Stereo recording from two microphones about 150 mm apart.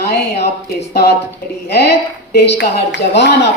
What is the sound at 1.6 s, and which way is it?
Speech, 90° left.